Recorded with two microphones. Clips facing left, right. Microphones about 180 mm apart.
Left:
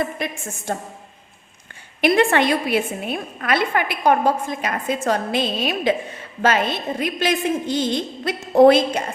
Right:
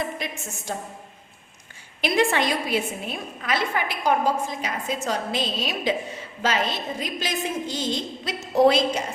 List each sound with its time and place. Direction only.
0.0 s a woman's voice: 55° left (ahead or behind)
2.0 s a woman's voice: 60° left (ahead or behind)